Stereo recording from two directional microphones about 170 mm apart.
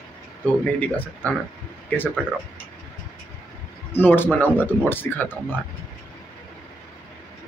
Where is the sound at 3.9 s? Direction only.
10° left (ahead or behind).